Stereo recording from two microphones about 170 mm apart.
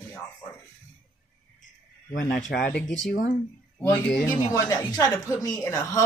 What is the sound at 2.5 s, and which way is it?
Speech, 65° left (ahead or behind).